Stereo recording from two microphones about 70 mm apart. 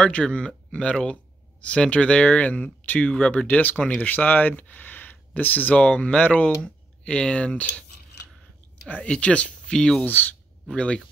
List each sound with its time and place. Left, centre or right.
0.0 s speech: centre
8.8 s speech: centre
10.0 s speech: left
10.7 s speech: centre